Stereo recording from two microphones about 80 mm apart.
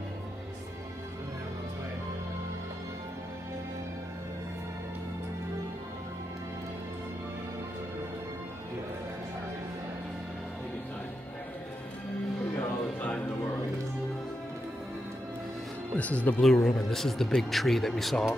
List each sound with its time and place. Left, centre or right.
12.5 s music: centre
16.0 s speech: centre
16.5 s speech: centre